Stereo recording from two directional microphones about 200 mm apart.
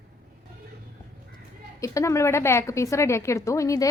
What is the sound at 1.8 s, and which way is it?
A woman's voice, 15° left (ahead or behind).